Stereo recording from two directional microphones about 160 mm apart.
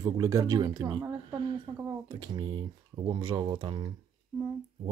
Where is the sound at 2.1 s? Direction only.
25° right (ahead or behind).